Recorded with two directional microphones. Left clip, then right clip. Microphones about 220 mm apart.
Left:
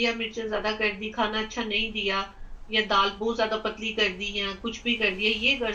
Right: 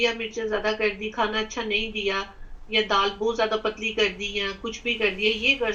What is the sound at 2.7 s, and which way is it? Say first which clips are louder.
Speech: right 1 dB; 25° right (ahead or behind).